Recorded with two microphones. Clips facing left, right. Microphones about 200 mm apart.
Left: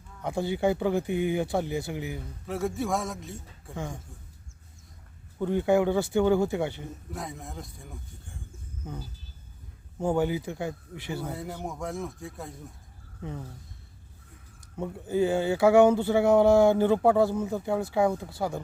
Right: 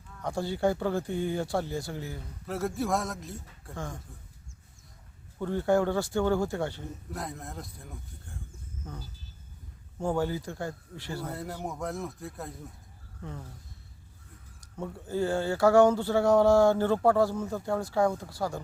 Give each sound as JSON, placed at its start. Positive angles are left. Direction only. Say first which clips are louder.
{"t": 0.3, "sound": "speech", "louder": "left 2 dB", "side_deg": 20}
{"t": 2.5, "sound": "speech", "louder": "left 1 dB", "side_deg": 0}
{"t": 5.4, "sound": "speech", "louder": "left 2 dB", "side_deg": 15}
{"t": 7.1, "sound": "speech", "louder": "even", "side_deg": 0}
{"t": 8.8, "sound": "speech", "louder": "left 4 dB", "side_deg": 15}
{"t": 11.2, "sound": "speech", "louder": "left 1 dB", "side_deg": 0}
{"t": 14.8, "sound": "speech", "louder": "left 4 dB", "side_deg": 15}
{"t": 17.3, "sound": "speech", "louder": "left 3 dB", "side_deg": 10}
{"t": 18.3, "sound": "speech", "louder": "left 2 dB", "side_deg": 20}